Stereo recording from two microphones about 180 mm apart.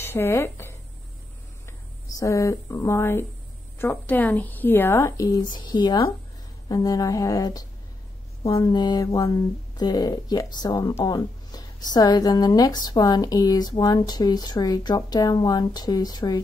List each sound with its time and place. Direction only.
0.0 s speech: 10° left (ahead or behind)